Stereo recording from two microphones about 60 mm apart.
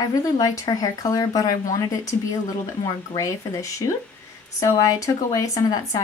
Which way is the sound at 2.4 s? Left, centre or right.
Left.